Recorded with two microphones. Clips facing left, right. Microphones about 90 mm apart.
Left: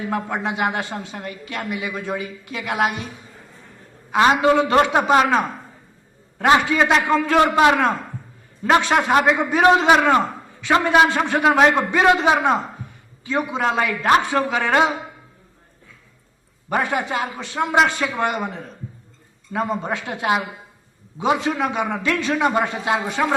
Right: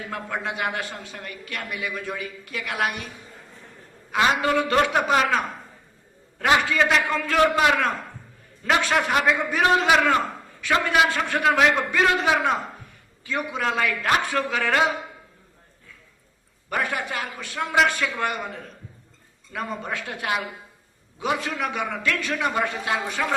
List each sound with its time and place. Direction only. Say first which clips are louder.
0.0 s a man's voice: left 6 dB; 20° left (ahead or behind)
4.1 s a man's voice: left 6 dB; 25° left (ahead or behind)
6.4 s a man's voice: left 4 dB; 25° left (ahead or behind)
16.6 s a man's voice: left 5 dB; 25° left (ahead or behind)